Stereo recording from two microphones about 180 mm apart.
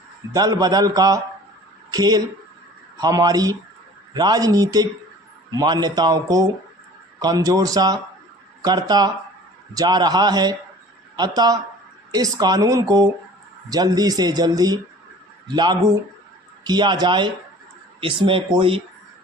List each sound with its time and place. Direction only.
0.3 s a woman's voice: 20° right (ahead or behind)